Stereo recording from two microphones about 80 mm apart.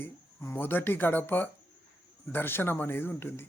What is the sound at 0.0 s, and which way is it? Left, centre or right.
Speech, left.